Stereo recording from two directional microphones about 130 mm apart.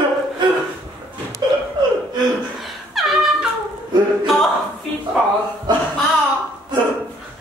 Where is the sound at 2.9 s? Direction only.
Centre (ahead or behind).